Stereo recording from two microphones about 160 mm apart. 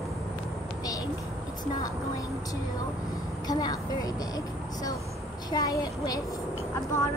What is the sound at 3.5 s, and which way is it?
A woman's voice, 25° left (ahead or behind).